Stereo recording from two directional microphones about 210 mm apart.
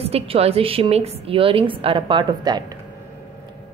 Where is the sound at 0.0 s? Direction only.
30° right (ahead or behind).